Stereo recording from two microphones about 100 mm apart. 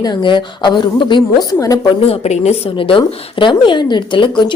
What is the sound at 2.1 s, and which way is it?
A woman's voice, 90° left.